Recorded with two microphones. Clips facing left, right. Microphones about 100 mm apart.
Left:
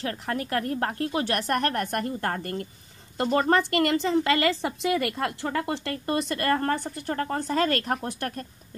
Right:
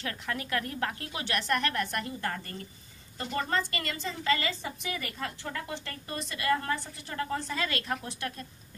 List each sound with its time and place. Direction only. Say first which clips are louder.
0.0 s a woman's voice: left 6 dB; 35° left (ahead or behind)